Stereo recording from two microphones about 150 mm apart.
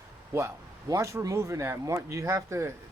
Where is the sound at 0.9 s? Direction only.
20° right (ahead or behind).